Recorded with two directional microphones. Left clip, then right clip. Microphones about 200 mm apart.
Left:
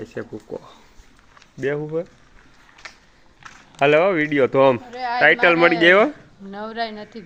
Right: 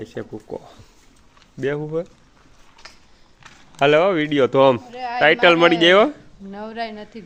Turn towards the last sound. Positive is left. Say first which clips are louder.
# left 2 dB
turn(degrees=-10)  # may be behind; listen again after turning